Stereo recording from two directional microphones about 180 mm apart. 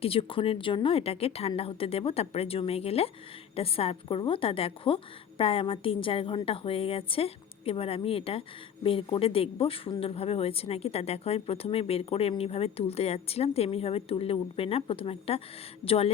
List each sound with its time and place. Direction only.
0.0 s a woman's voice: 30° left (ahead or behind)